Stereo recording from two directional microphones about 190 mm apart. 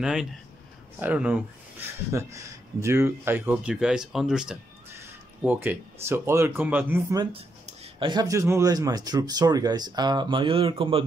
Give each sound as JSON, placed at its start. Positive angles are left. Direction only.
{"t": 0.0, "sound": "speech", "side_deg": 0}
{"t": 7.3, "sound": "speech", "side_deg": -30}